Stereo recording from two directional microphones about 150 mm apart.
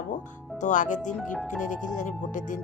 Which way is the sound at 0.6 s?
55° left (ahead or behind).